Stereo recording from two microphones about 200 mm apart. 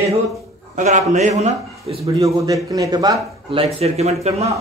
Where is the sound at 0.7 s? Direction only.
40° right (ahead or behind).